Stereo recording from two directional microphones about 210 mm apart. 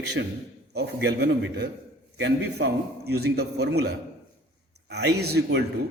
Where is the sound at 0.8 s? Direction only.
50° right (ahead or behind).